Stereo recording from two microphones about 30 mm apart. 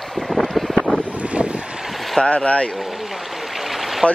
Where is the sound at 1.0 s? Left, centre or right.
Right.